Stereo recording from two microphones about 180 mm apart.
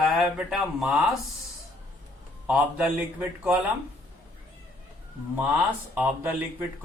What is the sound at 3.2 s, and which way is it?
Speech, 10° right (ahead or behind).